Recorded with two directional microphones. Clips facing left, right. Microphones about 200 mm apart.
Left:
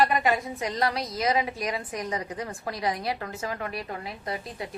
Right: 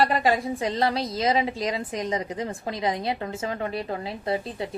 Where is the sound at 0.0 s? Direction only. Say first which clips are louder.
Right 2 dB; 30° right (ahead or behind).